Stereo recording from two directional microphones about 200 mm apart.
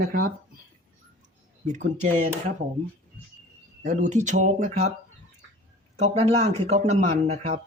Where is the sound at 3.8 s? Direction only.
35° right (ahead or behind).